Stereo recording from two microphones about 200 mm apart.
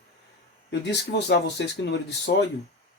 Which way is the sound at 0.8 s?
60° left (ahead or behind).